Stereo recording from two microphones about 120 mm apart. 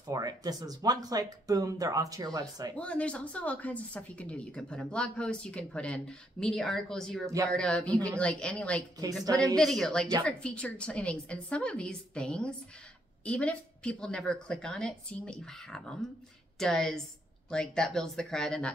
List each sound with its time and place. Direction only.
0.1 s speech: 30° right (ahead or behind)
2.8 s speech: 10° left (ahead or behind)
9.2 s speech: 30° right (ahead or behind)
9.6 s speech: 5° left (ahead or behind)